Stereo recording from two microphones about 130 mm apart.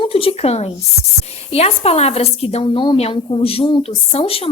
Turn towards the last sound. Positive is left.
turn(degrees=45)  # may be behind; listen again after turning